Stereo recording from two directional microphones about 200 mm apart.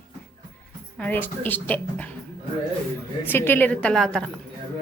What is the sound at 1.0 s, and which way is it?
A woman's voice, 10° left (ahead or behind).